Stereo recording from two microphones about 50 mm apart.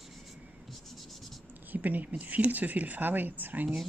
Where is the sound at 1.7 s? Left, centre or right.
Right.